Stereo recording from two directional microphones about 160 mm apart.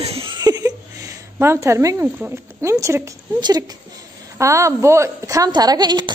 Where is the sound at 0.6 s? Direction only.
15° right (ahead or behind).